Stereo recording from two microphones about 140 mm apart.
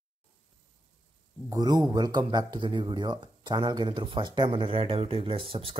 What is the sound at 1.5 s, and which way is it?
Speech, 30° right (ahead or behind).